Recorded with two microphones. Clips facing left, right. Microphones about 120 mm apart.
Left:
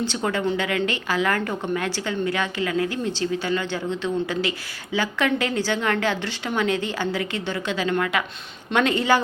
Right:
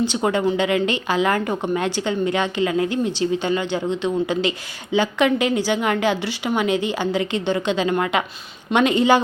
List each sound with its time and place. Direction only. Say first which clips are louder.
0.0 s a woman's voice: right 5 dB; 15° right (ahead or behind)